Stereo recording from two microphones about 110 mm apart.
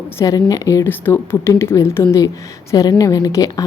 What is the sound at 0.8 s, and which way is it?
A woman's voice, 20° left (ahead or behind).